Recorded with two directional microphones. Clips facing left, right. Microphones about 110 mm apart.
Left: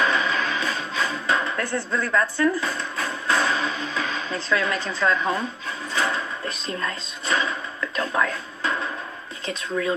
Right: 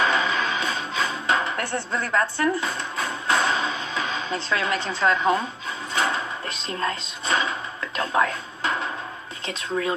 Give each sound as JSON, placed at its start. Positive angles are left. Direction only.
{"t": 0.0, "sound": "music", "side_deg": -20}
{"t": 1.9, "sound": "speech", "side_deg": -25}
{"t": 3.3, "sound": "a sound", "side_deg": -20}
{"t": 5.9, "sound": "music", "side_deg": -20}
{"t": 7.2, "sound": "music", "side_deg": -25}